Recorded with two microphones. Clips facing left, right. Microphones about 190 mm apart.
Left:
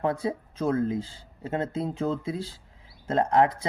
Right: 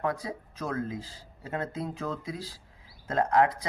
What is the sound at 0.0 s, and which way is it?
Speech, 25° left (ahead or behind).